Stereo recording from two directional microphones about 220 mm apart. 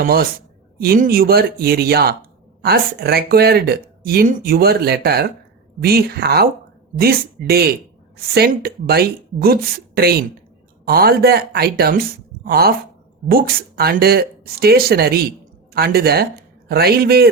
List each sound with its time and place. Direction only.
0.0 s speech: 45° right (ahead or behind)